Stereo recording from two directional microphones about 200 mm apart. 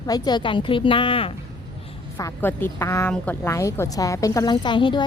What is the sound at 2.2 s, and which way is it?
A woman's voice, 15° left (ahead or behind).